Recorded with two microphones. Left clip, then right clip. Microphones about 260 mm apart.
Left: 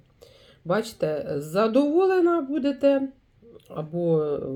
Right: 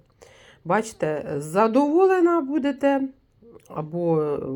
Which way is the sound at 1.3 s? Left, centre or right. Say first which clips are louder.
Right 3 dB; centre.